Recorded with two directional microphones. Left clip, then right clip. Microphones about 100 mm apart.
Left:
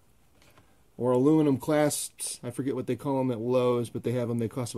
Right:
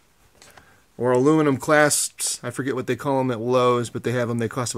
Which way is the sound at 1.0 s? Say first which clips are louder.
Right 5 dB; 25° left (ahead or behind).